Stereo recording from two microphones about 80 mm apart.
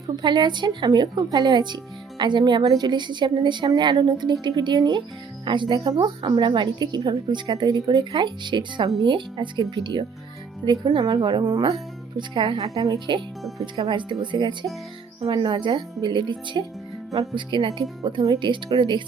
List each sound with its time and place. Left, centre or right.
0.2 s a woman's voice: right
2.6 s a woman's voice: right
5.5 s speech: right
5.7 s a woman's voice: right
6.3 s a woman's voice: right
12.6 s a woman's voice: right
13.9 s a woman's voice: right
17.3 s speech: right